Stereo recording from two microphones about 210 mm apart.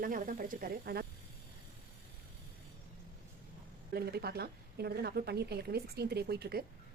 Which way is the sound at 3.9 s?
50° right (ahead or behind).